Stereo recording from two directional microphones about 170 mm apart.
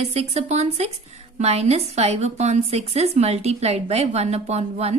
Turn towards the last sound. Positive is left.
turn(degrees=-40)  # may be behind; listen again after turning